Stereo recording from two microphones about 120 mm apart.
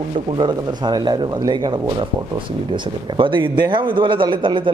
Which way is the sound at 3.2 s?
45° right (ahead or behind).